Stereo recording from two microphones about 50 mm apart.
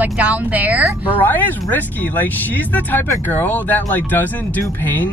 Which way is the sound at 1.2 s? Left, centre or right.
Left.